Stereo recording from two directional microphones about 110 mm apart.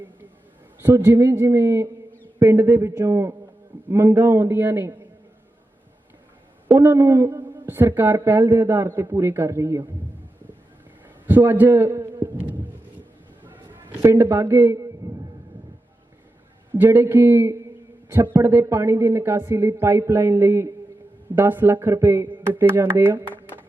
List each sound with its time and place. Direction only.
0.8 s a man's voice: 20° right (ahead or behind)
6.7 s a man's voice: 25° right (ahead or behind)
11.3 s a sound: 20° right (ahead or behind)
13.9 s a man's voice: 25° right (ahead or behind)
16.7 s a man's voice: 20° right (ahead or behind)